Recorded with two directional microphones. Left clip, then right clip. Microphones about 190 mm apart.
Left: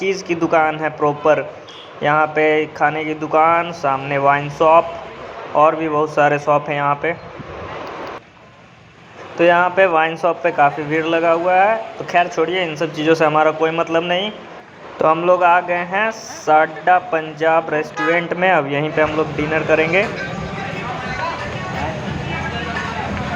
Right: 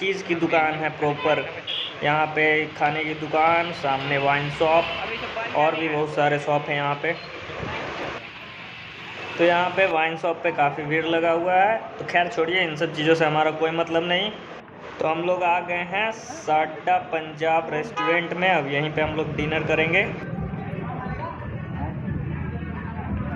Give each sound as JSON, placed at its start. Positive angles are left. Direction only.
{"t": 0.0, "sound": "a man's voice", "side_deg": 15}
{"t": 9.4, "sound": "a man's voice", "side_deg": 15}